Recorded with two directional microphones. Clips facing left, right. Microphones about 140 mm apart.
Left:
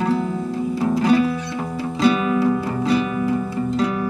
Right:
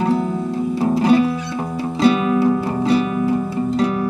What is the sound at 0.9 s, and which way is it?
Music, 30° right (ahead or behind).